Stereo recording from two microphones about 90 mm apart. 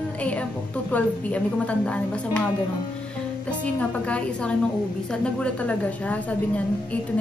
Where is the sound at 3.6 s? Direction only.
15° left (ahead or behind).